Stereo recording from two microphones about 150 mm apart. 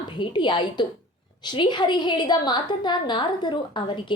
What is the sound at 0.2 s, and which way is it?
A woman's voice, 30° left (ahead or behind).